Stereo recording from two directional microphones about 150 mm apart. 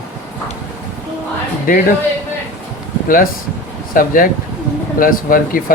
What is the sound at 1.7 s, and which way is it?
Speech, 70° left (ahead or behind).